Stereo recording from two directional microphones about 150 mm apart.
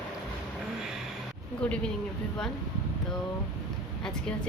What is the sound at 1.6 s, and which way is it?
Speech, 5° left (ahead or behind).